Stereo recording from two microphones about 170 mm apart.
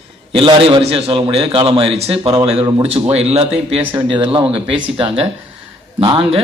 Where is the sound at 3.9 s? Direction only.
30° right (ahead or behind).